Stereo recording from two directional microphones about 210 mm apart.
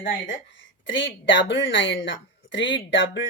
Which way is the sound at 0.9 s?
60° left (ahead or behind).